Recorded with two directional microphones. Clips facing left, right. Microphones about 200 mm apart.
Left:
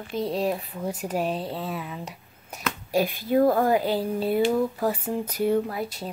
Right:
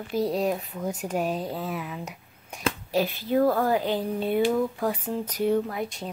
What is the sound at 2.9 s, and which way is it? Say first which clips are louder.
Speech: left 3 dB; 15° left (ahead or behind).